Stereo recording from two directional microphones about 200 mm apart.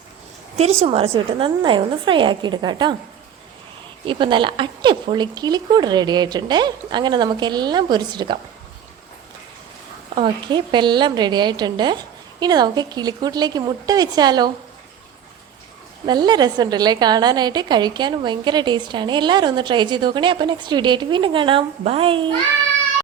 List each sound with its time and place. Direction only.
0.5 s a woman's voice: 30° right (ahead or behind)
4.0 s a woman's voice: 25° right (ahead or behind)
10.2 s a woman's voice: 25° right (ahead or behind)
16.0 s a woman's voice: 20° right (ahead or behind)